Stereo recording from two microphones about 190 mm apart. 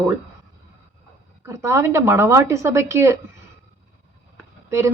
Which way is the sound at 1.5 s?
15° right (ahead or behind).